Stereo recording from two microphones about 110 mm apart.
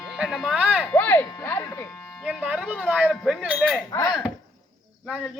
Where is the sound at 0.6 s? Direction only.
15° right (ahead or behind).